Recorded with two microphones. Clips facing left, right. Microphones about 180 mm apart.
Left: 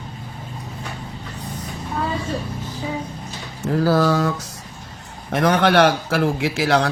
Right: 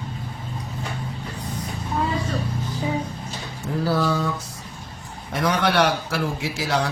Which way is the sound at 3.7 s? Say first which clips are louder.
Left 5 dB; 85° left.